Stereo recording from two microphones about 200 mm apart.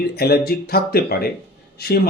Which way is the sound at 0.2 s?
50° left (ahead or behind).